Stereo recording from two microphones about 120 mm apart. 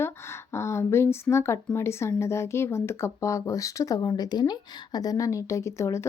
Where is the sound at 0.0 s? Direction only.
20° left (ahead or behind).